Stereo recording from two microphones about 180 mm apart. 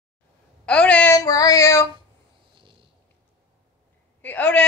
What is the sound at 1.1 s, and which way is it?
Child singing, 20° left (ahead or behind).